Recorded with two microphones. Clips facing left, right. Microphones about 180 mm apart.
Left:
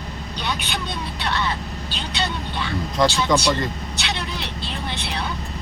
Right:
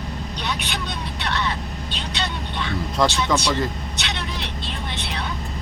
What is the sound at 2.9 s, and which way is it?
Speech, centre (ahead or behind).